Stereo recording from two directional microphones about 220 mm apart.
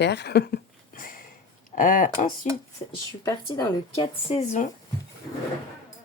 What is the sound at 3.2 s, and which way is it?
Speech, 15° left (ahead or behind).